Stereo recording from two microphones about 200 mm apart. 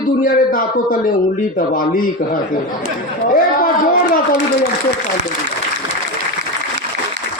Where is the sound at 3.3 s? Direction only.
45° left (ahead or behind).